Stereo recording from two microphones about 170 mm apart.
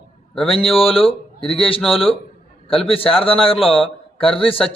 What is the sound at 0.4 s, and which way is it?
A man's voice, 35° left (ahead or behind).